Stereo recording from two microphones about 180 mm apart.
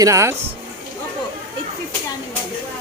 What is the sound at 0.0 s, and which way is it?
Speech, 15° right (ahead or behind).